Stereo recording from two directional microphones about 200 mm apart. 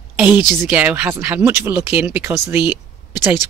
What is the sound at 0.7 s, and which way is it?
Speech, 10° right (ahead or behind).